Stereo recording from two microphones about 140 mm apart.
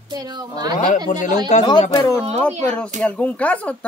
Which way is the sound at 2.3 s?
55° right (ahead or behind).